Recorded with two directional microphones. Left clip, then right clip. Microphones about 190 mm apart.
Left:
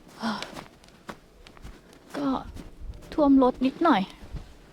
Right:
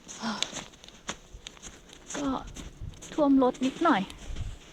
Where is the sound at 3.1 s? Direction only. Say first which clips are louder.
Left 3 dB; 30° left (ahead or behind).